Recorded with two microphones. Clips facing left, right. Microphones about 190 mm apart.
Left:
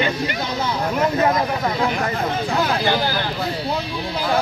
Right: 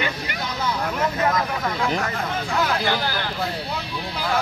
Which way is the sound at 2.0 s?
30° left (ahead or behind).